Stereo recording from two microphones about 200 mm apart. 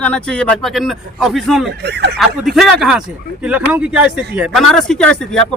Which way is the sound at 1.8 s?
60° right (ahead or behind).